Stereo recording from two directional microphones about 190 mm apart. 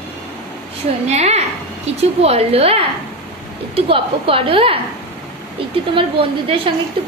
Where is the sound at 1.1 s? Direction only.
35° right (ahead or behind).